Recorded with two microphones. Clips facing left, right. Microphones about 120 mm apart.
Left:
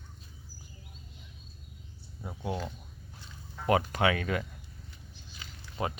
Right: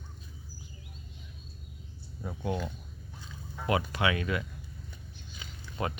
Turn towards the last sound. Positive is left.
turn(degrees=25)  # may be behind; listen again after turning